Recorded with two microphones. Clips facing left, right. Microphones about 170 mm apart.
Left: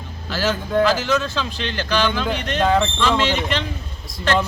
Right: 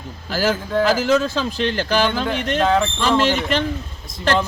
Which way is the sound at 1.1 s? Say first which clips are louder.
Right 4 dB; 35° right (ahead or behind).